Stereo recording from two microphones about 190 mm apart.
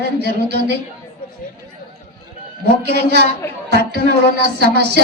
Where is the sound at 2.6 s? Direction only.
60° right (ahead or behind).